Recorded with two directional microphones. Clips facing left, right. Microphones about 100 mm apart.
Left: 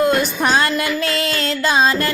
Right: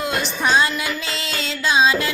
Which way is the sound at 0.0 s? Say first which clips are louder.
Left 6 dB; 50° left (ahead or behind).